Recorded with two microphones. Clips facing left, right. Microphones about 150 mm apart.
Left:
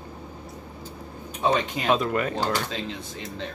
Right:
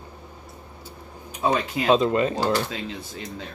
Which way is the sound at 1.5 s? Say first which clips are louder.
Right 2 dB; 5° right (ahead or behind).